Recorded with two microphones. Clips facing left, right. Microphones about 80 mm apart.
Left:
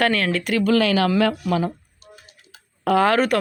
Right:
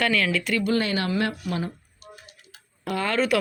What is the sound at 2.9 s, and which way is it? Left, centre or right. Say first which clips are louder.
Speech: left 8 dB; left.